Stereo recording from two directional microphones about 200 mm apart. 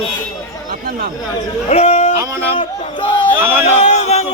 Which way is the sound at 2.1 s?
15° right (ahead or behind).